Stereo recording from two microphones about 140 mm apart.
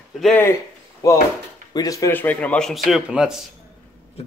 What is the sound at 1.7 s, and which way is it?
A man's voice, 25° left (ahead or behind).